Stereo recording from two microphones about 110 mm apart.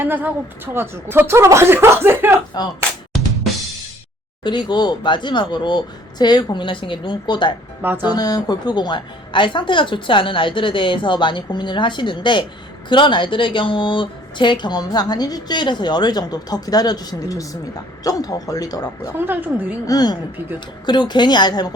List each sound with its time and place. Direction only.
0.0 s speech: 15° right (ahead or behind)
2.5 s a woman's voice: 40° left (ahead or behind)
4.4 s a woman's voice: 45° left (ahead or behind)
7.8 s speech: 15° right (ahead or behind)
8.0 s a woman's voice: 40° left (ahead or behind)
19.1 s a woman's voice: 20° right (ahead or behind)
19.9 s a woman's voice: 35° left (ahead or behind)